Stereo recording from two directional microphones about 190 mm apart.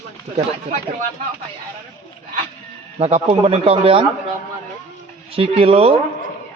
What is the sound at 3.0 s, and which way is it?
Speech, 30° right (ahead or behind).